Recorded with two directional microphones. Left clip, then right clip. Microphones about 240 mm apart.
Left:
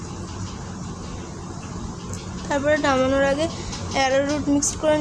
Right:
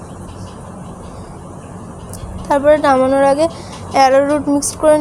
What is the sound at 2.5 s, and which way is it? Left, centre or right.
A woman's voice, right.